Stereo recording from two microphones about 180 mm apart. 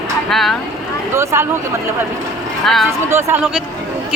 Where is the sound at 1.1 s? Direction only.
15° right (ahead or behind).